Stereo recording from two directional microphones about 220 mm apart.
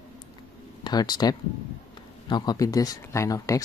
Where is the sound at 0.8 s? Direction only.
20° left (ahead or behind).